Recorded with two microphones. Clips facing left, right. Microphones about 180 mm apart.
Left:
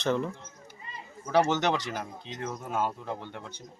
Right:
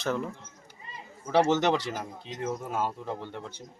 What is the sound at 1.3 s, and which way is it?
A man's voice, 5° right (ahead or behind).